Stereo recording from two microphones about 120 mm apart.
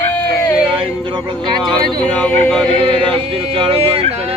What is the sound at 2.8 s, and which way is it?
Yodeling, 50° right (ahead or behind).